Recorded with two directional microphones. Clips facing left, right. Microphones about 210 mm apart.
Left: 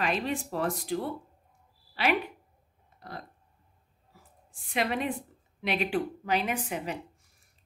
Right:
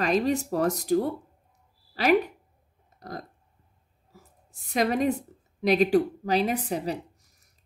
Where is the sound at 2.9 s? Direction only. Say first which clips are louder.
Right 5 dB; 40° right (ahead or behind).